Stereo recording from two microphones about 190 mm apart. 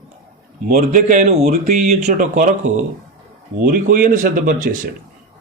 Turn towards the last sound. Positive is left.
turn(degrees=-45)  # may be behind; listen again after turning